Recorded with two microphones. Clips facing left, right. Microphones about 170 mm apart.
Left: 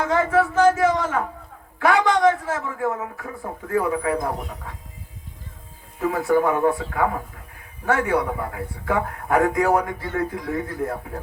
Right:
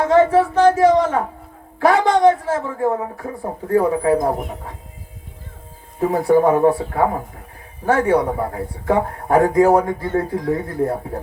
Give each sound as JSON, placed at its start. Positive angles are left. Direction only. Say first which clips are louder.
{"t": 0.0, "sound": "speech", "louder": "right 6 dB", "side_deg": -30}
{"t": 6.0, "sound": "speech", "louder": "right 5 dB", "side_deg": -35}